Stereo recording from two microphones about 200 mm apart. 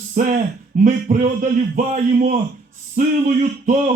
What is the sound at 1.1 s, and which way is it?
Speech, 40° right (ahead or behind).